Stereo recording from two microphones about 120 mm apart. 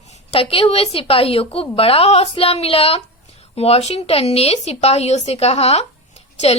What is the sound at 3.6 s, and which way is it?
A woman's voice, 60° left (ahead or behind).